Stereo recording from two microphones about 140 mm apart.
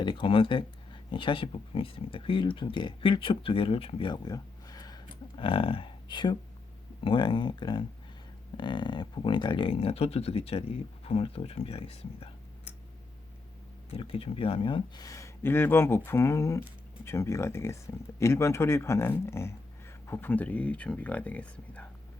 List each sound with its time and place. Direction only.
0.0 s speech: 35° left (ahead or behind)
13.9 s speech: 40° left (ahead or behind); by 21.8 s 10° left (ahead or behind)